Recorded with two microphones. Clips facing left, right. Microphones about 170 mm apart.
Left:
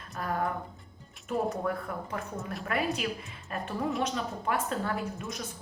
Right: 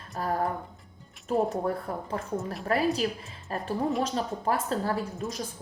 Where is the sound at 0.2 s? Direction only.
35° right (ahead or behind).